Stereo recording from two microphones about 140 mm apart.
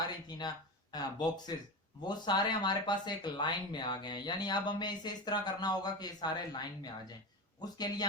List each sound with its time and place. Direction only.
0.3 s a man's voice: 30° left (ahead or behind)